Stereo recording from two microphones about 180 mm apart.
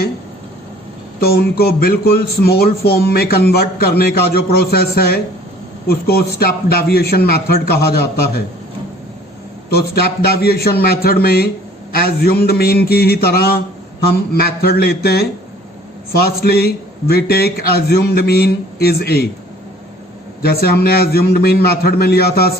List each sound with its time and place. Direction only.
1.2 s speech: 60° left (ahead or behind)
9.6 s speech: 60° left (ahead or behind)
20.4 s speech: 60° left (ahead or behind)